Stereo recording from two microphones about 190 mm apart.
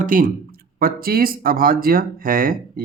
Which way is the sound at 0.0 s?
45° right (ahead or behind).